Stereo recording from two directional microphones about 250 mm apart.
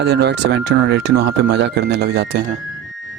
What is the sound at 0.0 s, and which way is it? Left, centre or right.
Speech, right.